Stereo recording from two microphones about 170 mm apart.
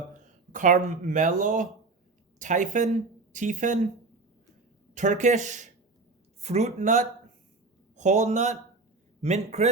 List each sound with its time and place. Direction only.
0.1 s speech: 50° right (ahead or behind)
4.9 s a man's voice: 45° right (ahead or behind)